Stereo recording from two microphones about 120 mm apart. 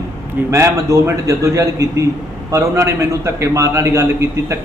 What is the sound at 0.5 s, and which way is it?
A man's voice, 25° right (ahead or behind).